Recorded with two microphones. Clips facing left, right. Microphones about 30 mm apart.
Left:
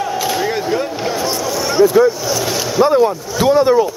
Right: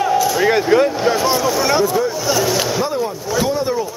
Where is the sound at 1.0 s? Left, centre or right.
Centre.